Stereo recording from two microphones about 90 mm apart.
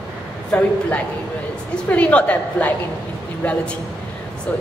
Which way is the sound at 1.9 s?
15° left (ahead or behind).